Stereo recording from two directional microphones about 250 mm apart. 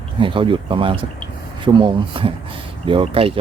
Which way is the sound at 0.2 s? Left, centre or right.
Right.